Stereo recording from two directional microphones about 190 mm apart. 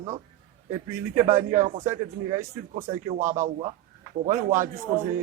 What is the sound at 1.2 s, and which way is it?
A man's voice, 40° right (ahead or behind).